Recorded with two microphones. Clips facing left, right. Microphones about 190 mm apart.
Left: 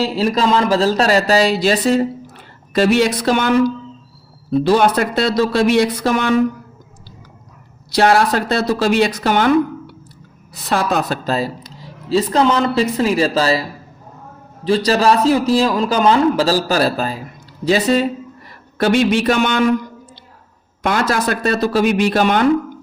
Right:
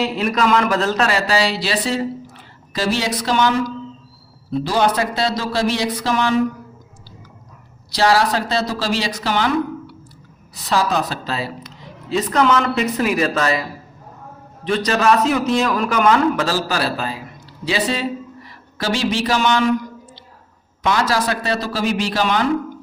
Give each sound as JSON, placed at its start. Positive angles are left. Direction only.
{"t": 0.0, "sound": "speech", "side_deg": 30}
{"t": 7.9, "sound": "a woman's voice", "side_deg": 55}
{"t": 14.8, "sound": "a woman's voice", "side_deg": 35}
{"t": 18.8, "sound": "speech", "side_deg": 60}
{"t": 20.8, "sound": "speech", "side_deg": 55}